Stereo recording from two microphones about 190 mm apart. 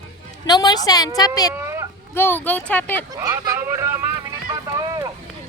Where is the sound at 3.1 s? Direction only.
20° right (ahead or behind).